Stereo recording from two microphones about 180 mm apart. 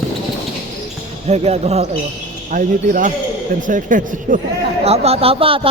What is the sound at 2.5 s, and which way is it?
Speech, 45° right (ahead or behind).